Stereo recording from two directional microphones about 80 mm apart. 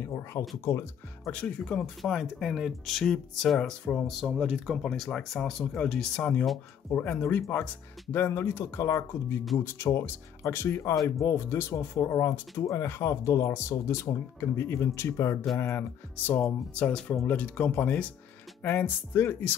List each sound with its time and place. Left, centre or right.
0.1 s speech: left
1.3 s speech: centre
4.1 s speech: centre
4.8 s speech: centre; by 15.3 s left
15.6 s speech: left